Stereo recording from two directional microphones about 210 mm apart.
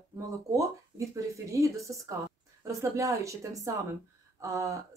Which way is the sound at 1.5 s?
15° right (ahead or behind).